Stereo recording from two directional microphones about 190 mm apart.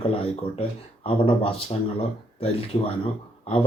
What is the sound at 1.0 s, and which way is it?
Speech, 30° left (ahead or behind).